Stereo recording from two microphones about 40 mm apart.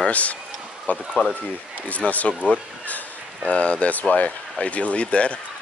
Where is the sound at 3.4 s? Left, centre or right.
Left.